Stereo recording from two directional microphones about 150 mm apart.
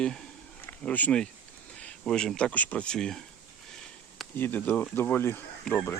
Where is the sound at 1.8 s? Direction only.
5° left (ahead or behind).